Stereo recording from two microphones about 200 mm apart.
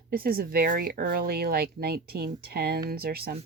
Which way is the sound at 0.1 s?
50° right (ahead or behind).